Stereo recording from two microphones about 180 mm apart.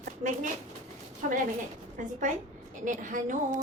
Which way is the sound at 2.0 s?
45° right (ahead or behind).